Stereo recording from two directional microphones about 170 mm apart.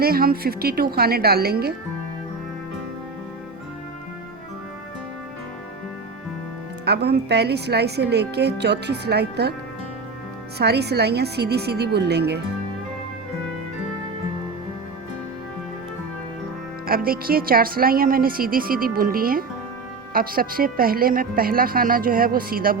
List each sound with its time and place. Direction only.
0.0 s speech: 60° right (ahead or behind)
6.8 s speech: 70° right (ahead or behind)
10.6 s speech: 75° right (ahead or behind)
16.8 s speech: 60° right (ahead or behind)